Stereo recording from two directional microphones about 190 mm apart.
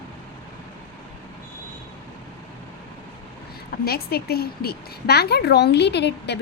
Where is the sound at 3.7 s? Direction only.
55° left (ahead or behind).